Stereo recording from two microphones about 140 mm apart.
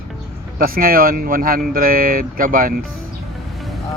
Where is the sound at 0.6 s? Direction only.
90° right.